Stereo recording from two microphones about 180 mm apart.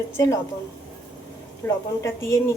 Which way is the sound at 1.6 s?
15° left (ahead or behind).